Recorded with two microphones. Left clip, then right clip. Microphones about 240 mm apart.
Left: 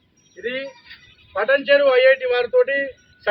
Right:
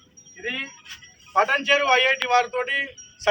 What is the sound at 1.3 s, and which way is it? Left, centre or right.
Speech, right.